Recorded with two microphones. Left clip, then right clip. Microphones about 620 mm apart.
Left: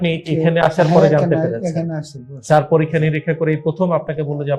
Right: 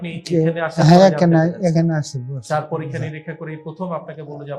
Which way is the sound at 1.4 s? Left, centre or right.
Right.